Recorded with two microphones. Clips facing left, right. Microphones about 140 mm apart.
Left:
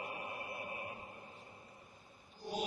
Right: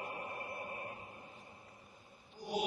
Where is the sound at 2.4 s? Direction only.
15° right (ahead or behind).